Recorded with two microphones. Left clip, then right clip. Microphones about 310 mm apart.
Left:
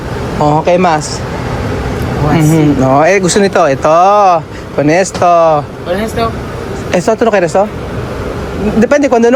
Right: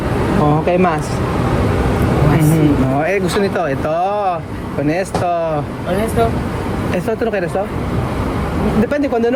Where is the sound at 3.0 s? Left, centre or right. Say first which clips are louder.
Left 8 dB; centre.